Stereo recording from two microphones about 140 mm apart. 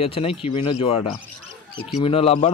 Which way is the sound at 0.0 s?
45° left (ahead or behind).